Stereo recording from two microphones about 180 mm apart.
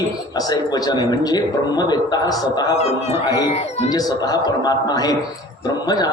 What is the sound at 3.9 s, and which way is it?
A man's voice, 20° left (ahead or behind).